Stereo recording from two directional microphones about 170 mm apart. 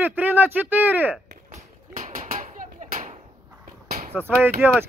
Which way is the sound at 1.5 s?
50° right (ahead or behind).